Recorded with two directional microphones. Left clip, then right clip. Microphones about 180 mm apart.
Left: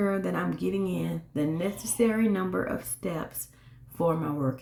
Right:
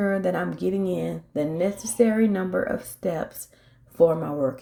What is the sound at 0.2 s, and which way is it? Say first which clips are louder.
Speech: right 5 dB; 15° right (ahead or behind).